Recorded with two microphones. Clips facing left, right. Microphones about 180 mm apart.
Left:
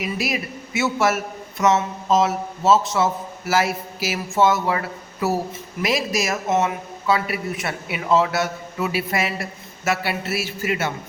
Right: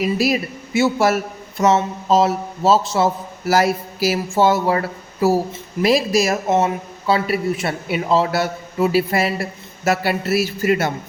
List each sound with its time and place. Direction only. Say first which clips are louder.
0.0 s a man's voice: right 7 dB; 35° right (ahead or behind)